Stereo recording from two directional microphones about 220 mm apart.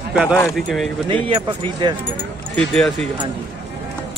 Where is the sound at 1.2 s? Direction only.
25° right (ahead or behind).